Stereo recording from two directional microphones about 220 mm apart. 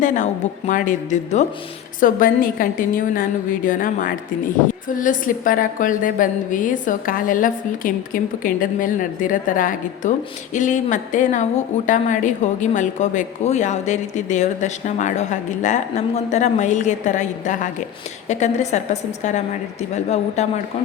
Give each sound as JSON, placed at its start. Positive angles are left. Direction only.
{"t": 0.0, "sound": "a woman's voice", "side_deg": 35}